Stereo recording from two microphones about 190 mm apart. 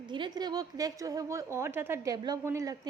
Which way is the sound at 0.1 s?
25° right (ahead or behind).